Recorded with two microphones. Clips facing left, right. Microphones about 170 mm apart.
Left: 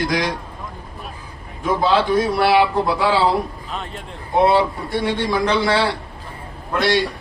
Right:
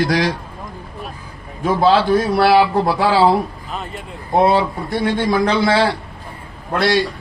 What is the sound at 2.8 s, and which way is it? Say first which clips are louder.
Speech: right 3 dB; 60° right (ahead or behind).